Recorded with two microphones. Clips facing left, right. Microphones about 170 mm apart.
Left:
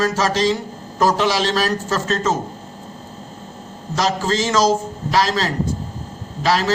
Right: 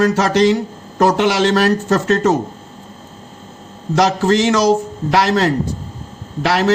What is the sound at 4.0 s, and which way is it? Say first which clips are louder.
A man's voice: right 6 dB; 65° right (ahead or behind).